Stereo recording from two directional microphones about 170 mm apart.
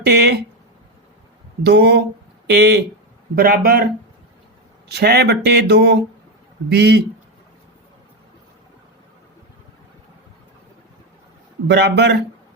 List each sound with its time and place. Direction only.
0.0 s speech: 75° right (ahead or behind)
1.6 s speech: 80° right
3.3 s speech: 60° right (ahead or behind)
4.9 s speech: 75° right (ahead or behind)
11.7 s speech: 80° right